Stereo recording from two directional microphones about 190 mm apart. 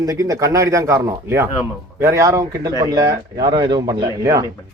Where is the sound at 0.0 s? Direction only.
15° right (ahead or behind).